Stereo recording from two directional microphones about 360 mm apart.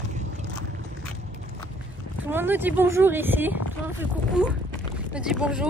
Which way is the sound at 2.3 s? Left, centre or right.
Centre.